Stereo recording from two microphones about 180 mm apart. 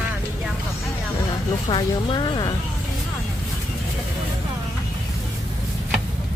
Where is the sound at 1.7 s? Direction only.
25° left (ahead or behind).